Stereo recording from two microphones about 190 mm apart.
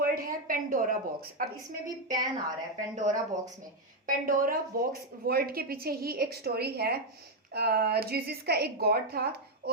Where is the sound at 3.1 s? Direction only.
40° right (ahead or behind).